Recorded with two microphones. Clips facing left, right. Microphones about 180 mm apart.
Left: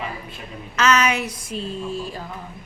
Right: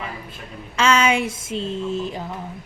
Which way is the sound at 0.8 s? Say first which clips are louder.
Right 1 dB; 30° right (ahead or behind).